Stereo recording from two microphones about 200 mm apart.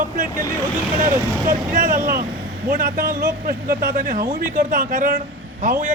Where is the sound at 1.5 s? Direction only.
45° right (ahead or behind).